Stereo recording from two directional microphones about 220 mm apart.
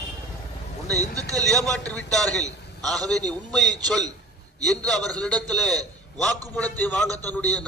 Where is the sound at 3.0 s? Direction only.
15° right (ahead or behind).